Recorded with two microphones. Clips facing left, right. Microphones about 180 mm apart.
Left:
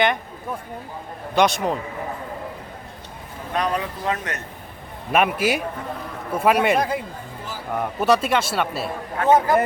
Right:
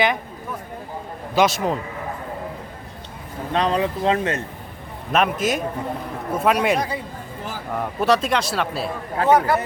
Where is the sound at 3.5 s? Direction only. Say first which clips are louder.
Right 4 dB; 25° right (ahead or behind).